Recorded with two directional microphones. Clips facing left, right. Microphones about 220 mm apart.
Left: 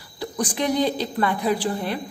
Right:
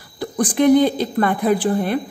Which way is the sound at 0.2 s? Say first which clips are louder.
Right 8 dB; 50° right (ahead or behind).